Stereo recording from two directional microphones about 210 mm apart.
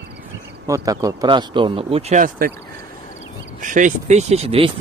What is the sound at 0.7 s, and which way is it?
Speech, 15° right (ahead or behind).